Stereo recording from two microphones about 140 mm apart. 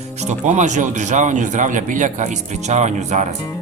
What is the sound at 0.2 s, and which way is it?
Speech, 55° right (ahead or behind).